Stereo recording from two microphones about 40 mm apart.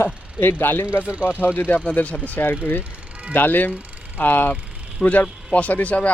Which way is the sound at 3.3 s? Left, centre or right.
Left.